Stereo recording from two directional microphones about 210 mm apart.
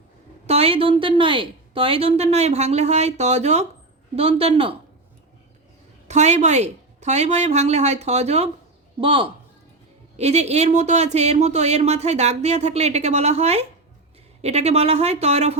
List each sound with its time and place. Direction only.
0.4 s a woman's voice: 30° right (ahead or behind)
6.1 s a woman's voice: 35° right (ahead or behind)